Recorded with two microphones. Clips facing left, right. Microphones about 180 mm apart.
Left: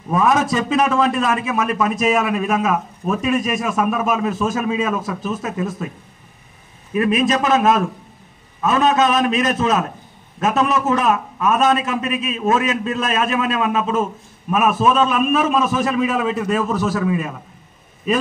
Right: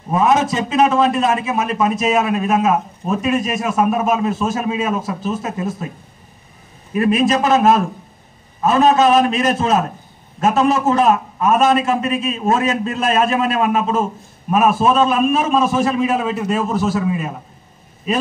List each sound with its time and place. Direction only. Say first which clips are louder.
0.1 s a man's voice: right 1 dB; 25° right (ahead or behind)
6.9 s a man's voice: right 2 dB; 30° right (ahead or behind)